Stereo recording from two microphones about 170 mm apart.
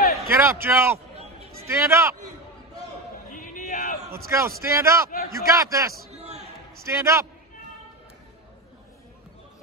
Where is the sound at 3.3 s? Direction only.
50° left (ahead or behind).